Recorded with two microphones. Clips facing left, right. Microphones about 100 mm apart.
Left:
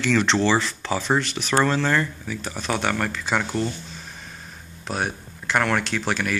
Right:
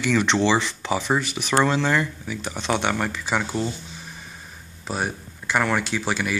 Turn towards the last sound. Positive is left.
turn(degrees=-10)  # may be behind; listen again after turning